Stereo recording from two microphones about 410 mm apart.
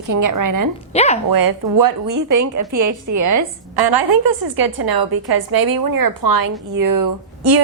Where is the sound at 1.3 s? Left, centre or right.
Right.